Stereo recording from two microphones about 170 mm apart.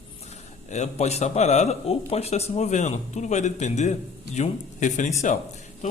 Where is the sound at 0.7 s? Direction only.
40° left (ahead or behind).